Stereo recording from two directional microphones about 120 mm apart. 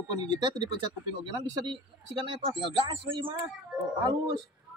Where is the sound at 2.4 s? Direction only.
45° right (ahead or behind).